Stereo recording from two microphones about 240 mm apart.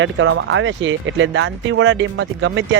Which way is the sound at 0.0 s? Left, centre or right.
Right.